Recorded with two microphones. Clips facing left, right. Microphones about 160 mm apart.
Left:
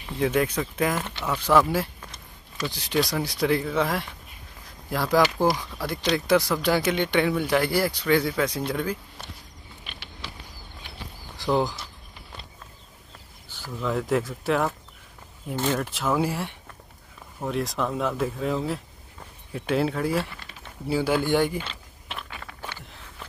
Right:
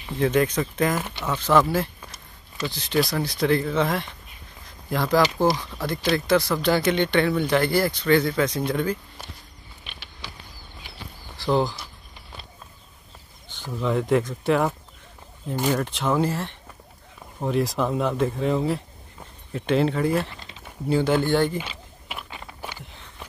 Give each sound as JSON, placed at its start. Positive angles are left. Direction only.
{"t": 0.2, "sound": "speech", "side_deg": 5}
{"t": 0.9, "sound": "speech", "side_deg": -10}
{"t": 1.2, "sound": "speech", "side_deg": 10}
{"t": 2.7, "sound": "speech", "side_deg": 10}
{"t": 11.5, "sound": "speech", "side_deg": 5}
{"t": 13.5, "sound": "a sound", "side_deg": 10}
{"t": 13.8, "sound": "speech", "side_deg": 0}
{"t": 15.5, "sound": "speech", "side_deg": -10}
{"t": 15.8, "sound": "speech", "side_deg": 5}
{"t": 17.5, "sound": "speech", "side_deg": 0}
{"t": 21.5, "sound": "a sound", "side_deg": -10}
{"t": 22.3, "sound": "a sound", "side_deg": -20}